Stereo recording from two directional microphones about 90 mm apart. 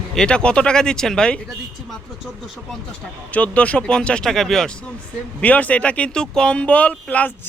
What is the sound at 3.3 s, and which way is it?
Speech, 15° left (ahead or behind).